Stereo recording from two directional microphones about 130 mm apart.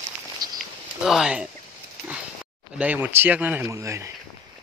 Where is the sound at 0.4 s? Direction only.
30° right (ahead or behind).